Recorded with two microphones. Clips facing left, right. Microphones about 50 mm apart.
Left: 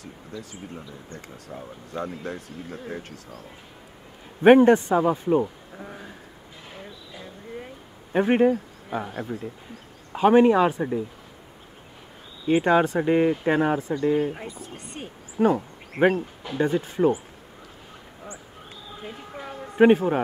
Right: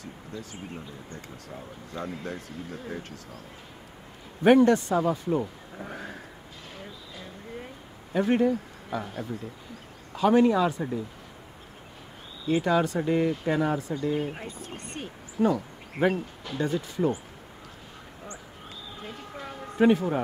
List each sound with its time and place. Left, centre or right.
1.9 s a man's voice: left
2.2 s a man's voice: left
3.0 s speech: left
4.4 s a man's voice: left
5.9 s speech: right
8.1 s a man's voice: left
12.4 s a man's voice: left
15.0 s a man's voice: centre
15.3 s speech: left
16.5 s a man's voice: left
19.0 s a sound: centre
19.8 s a man's voice: left